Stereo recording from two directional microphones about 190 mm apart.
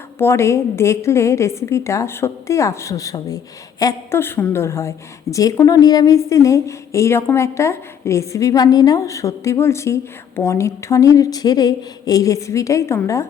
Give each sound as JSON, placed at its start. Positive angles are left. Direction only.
{"t": 0.2, "sound": "a woman's voice", "side_deg": 15}